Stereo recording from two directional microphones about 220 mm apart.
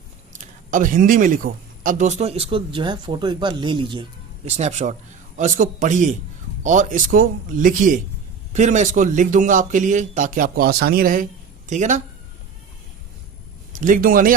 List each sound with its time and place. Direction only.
0.3 s a man's voice: 35° right (ahead or behind)
13.7 s a man's voice: 35° right (ahead or behind)